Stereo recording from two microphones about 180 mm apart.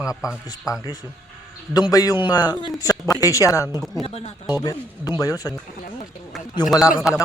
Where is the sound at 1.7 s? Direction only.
20° left (ahead or behind).